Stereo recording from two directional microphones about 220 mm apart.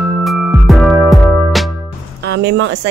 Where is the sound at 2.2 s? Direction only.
50° right (ahead or behind).